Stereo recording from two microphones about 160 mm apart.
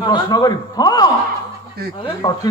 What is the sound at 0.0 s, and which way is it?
A man's voice, 25° left (ahead or behind).